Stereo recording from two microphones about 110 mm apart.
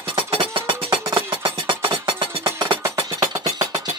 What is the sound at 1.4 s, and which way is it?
Music, 50° right (ahead or behind).